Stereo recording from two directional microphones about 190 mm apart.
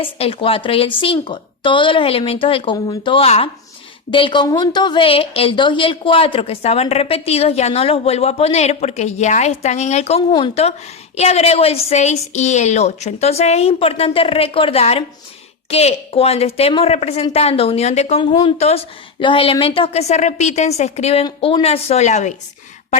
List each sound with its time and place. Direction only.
0.0 s a woman's voice: 30° left (ahead or behind)